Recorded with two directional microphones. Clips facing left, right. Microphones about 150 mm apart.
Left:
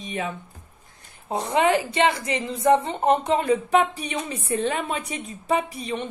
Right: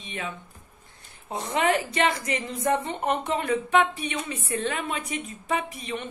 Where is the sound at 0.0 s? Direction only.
35° left (ahead or behind).